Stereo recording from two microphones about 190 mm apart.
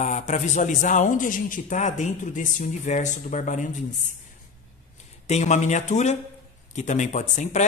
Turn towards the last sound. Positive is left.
turn(degrees=40)  # may be behind; listen again after turning